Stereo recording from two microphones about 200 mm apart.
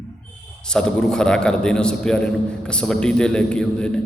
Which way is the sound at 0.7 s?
5° left (ahead or behind).